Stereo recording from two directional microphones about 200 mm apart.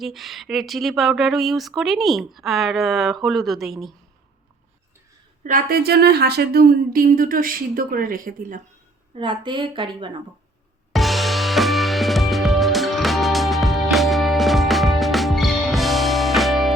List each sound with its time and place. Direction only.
0.0 s speech: centre (ahead or behind)
5.4 s speech: 40° right (ahead or behind)
9.1 s a woman's voice: 25° right (ahead or behind)
10.9 s music: centre (ahead or behind)